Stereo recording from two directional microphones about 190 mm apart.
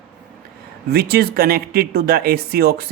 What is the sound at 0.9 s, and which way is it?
Speech, 55° right (ahead or behind).